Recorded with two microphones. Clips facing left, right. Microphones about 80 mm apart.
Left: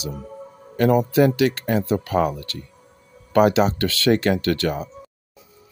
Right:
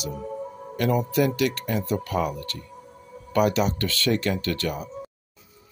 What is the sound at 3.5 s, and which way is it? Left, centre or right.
Speech, left.